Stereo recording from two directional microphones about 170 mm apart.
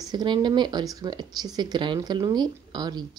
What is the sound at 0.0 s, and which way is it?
Speech, 25° right (ahead or behind).